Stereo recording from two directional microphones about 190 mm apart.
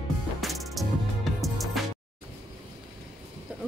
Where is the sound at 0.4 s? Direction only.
Centre (ahead or behind).